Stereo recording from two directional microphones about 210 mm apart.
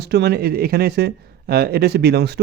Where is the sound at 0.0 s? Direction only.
50° right (ahead or behind).